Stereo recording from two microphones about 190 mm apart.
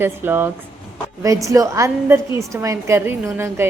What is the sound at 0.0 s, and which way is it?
A woman's voice, 10° right (ahead or behind).